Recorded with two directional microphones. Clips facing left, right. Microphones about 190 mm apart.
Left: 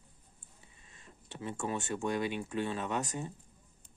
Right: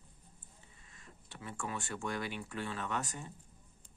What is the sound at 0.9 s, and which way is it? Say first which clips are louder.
Speech: left 5 dB; 25° left (ahead or behind).